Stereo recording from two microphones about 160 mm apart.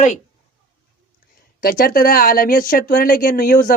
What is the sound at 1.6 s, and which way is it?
Speech, 60° left (ahead or behind).